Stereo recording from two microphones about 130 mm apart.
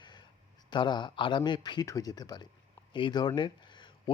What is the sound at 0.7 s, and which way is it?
Speech, 35° left (ahead or behind).